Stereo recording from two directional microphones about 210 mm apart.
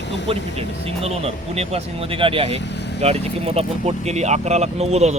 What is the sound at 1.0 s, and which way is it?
Speech, 30° right (ahead or behind).